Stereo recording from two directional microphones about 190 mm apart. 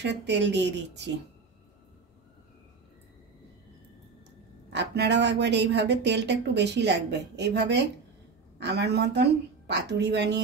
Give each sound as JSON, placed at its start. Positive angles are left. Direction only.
{"t": 0.0, "sound": "a woman's voice", "side_deg": -65}
{"t": 4.7, "sound": "speech", "side_deg": -65}